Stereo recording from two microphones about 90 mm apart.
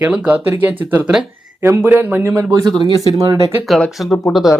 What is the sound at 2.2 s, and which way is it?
Speech, 35° right (ahead or behind).